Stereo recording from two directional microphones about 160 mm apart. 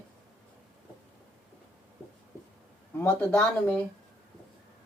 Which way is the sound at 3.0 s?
10° left (ahead or behind).